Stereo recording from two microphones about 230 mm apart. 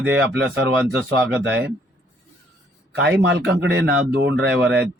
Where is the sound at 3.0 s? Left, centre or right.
Right.